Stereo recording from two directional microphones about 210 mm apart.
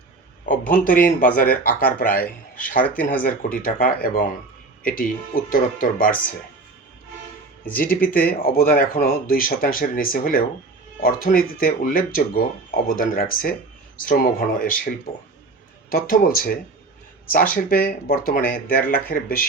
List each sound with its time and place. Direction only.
0.7 s speech: 40° left (ahead or behind)
7.6 s speech: 40° left (ahead or behind)
15.9 s speech: 40° left (ahead or behind)